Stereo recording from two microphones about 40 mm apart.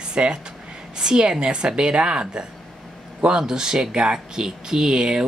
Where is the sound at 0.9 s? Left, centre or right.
Centre.